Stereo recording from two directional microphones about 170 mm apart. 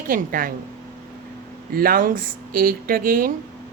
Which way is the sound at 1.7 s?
60° right (ahead or behind).